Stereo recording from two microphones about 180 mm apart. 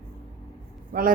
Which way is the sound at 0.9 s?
50° right (ahead or behind).